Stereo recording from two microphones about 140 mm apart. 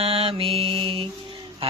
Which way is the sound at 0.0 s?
40° right (ahead or behind).